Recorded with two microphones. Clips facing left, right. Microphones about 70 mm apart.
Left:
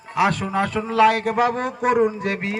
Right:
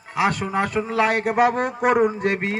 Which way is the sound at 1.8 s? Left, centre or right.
Right.